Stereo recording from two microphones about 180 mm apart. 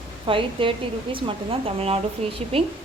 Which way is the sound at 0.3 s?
30° right (ahead or behind).